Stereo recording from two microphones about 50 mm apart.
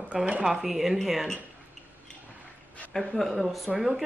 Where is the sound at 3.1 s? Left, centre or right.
Centre.